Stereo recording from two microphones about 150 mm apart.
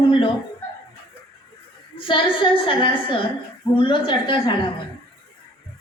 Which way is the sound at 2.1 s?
35° left (ahead or behind).